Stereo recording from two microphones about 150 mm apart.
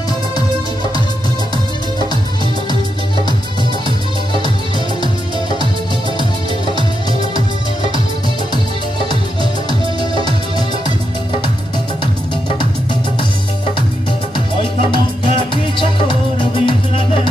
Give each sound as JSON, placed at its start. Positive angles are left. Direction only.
{"t": 9.1, "sound": "music", "side_deg": -35}
{"t": 14.9, "sound": "music", "side_deg": 35}